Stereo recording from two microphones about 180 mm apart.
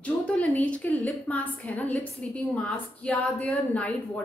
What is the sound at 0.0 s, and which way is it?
A woman's voice, 5° left (ahead or behind).